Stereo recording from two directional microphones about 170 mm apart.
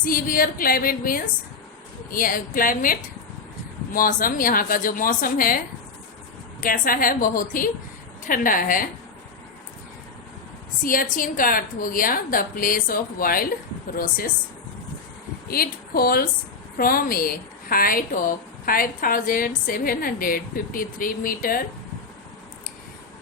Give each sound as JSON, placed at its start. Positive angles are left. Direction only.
{"t": 0.0, "sound": "a woman's voice", "side_deg": 55}
{"t": 10.8, "sound": "a woman's voice", "side_deg": 55}
{"t": 15.4, "sound": "a woman's voice", "side_deg": 60}